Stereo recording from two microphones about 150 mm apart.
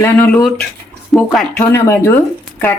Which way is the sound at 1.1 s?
5° left (ahead or behind).